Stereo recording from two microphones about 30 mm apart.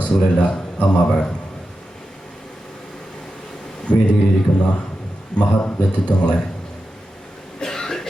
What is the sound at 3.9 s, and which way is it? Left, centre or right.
Speech, left.